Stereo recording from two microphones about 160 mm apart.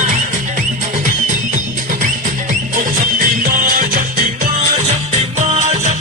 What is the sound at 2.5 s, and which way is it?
Music, 55° right (ahead or behind).